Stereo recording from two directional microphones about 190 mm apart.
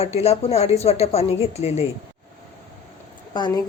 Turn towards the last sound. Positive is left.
turn(degrees=25)  # may be behind; listen again after turning